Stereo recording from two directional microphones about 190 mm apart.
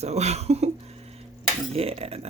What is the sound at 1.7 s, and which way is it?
Speech, 30° right (ahead or behind).